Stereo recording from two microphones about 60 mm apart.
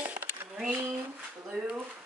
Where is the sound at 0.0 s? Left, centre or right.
Right.